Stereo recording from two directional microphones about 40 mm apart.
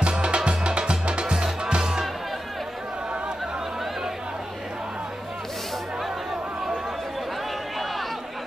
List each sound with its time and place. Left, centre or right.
0.0 s music: right